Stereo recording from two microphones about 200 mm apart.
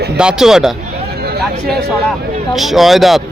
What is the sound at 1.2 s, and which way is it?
Speech, 50° right (ahead or behind).